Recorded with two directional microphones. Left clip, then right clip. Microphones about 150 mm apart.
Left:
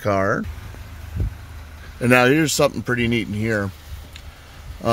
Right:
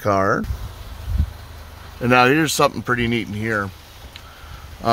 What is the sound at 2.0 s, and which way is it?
Speech, 15° left (ahead or behind).